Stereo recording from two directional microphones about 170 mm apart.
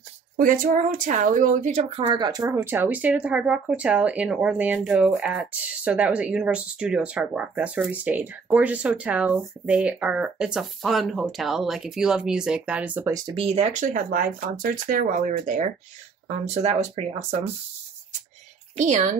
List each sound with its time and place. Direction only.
0.4 s speech: 50° right (ahead or behind); by 13.1 s 10° right (ahead or behind)
13.4 s speech: 35° right (ahead or behind)